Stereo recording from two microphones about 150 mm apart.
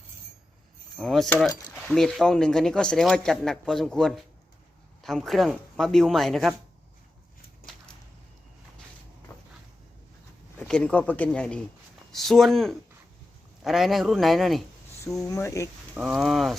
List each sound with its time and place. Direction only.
0.9 s speech: 5° left (ahead or behind)
10.7 s speech: 5° left (ahead or behind)
15.0 s speech: 20° left (ahead or behind)
16.0 s speech: centre (ahead or behind)